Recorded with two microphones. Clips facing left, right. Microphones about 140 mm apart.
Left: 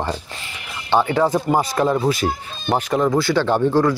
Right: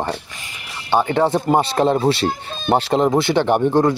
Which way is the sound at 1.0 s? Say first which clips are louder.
Right 1 dB; 30° right (ahead or behind).